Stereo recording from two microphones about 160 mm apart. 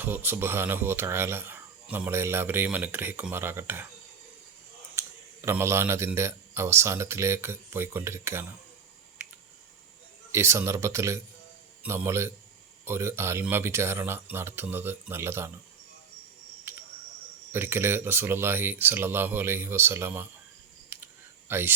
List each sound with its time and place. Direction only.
0.0 s speech: 10° right (ahead or behind)
4.9 s a man's voice: 15° right (ahead or behind)
9.2 s a sound: 10° right (ahead or behind)
10.3 s speech: 15° right (ahead or behind)
16.7 s cricket: 15° right (ahead or behind)
17.5 s speech: 15° right (ahead or behind)
20.9 s clicking: 15° right (ahead or behind)